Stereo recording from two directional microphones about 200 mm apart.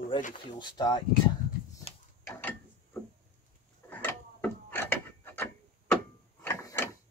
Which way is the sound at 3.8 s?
10° left (ahead or behind).